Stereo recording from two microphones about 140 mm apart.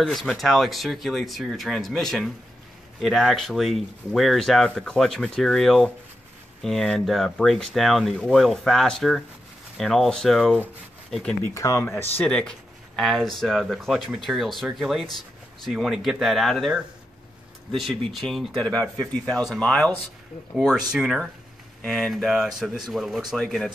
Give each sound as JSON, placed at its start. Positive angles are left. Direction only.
{"t": 0.0, "sound": "speech", "side_deg": 0}
{"t": 11.5, "sound": "speech", "side_deg": 20}
{"t": 12.0, "sound": "speech", "side_deg": 10}
{"t": 20.5, "sound": "speech", "side_deg": -5}